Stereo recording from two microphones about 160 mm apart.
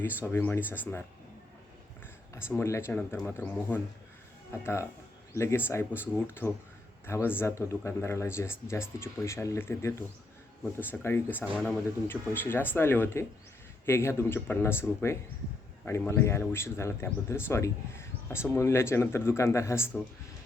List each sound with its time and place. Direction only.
0.3 s speech: 10° left (ahead or behind)
2.6 s speech: 15° left (ahead or behind)